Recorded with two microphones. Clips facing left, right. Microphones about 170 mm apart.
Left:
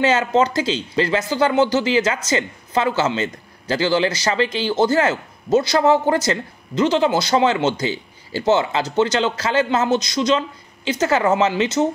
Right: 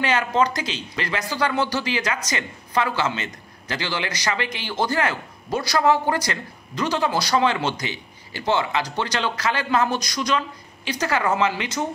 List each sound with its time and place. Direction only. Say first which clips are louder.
0.0 s speech: left 4 dB; 25° left (ahead or behind)